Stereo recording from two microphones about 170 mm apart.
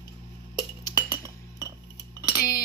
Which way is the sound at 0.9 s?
15° right (ahead or behind).